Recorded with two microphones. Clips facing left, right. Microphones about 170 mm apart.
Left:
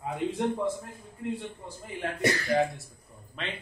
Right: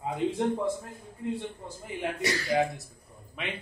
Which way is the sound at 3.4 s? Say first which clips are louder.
Right 1 dB; 10° right (ahead or behind).